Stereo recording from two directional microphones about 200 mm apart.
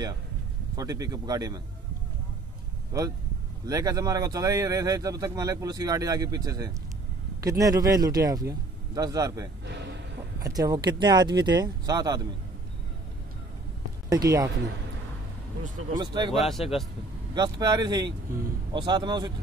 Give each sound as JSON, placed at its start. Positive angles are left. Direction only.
{"t": 0.7, "sound": "speech", "side_deg": -20}
{"t": 2.9, "sound": "speech", "side_deg": -15}
{"t": 14.0, "sound": "speech", "side_deg": -15}
{"t": 16.0, "sound": "speech", "side_deg": -20}
{"t": 16.3, "sound": "speech", "side_deg": 0}
{"t": 17.3, "sound": "speech", "side_deg": -20}